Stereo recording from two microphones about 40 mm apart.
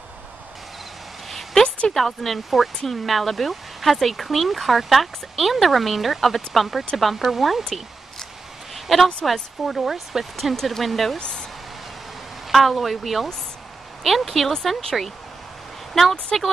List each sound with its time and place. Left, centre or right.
1.3 s a sound: centre
2.0 s speech: centre
8.7 s speech: centre
10.3 s speech: centre
11.1 s speech: left
12.4 s speech: centre
15.9 s speech: centre